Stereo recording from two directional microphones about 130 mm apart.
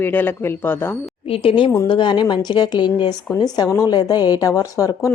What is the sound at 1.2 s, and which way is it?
A woman's voice, 45° left (ahead or behind).